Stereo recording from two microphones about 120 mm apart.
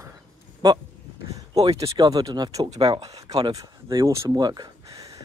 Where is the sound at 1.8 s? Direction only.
30° right (ahead or behind).